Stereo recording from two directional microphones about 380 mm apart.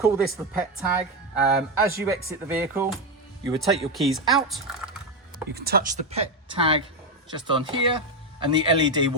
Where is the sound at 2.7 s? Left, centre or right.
Centre.